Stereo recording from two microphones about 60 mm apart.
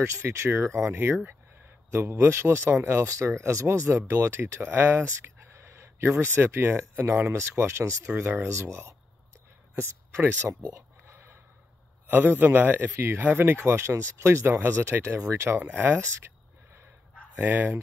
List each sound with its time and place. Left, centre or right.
0.0 s speech: right
0.9 s speech: right
12.1 s speech: right
15.5 s speech: right
17.4 s speech: right